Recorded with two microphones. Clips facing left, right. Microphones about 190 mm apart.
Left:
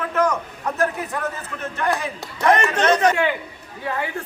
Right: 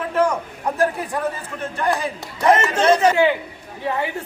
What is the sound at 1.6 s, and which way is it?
Speech, 30° right (ahead or behind).